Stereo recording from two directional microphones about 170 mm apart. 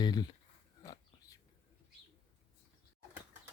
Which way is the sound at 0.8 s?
20° left (ahead or behind).